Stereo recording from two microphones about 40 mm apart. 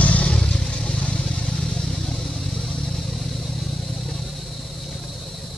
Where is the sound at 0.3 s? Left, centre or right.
Left.